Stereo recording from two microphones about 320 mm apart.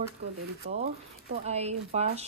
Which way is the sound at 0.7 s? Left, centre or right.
Centre.